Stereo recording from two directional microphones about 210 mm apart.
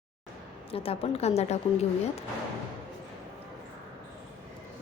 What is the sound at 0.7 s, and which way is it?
A woman's voice, 25° left (ahead or behind).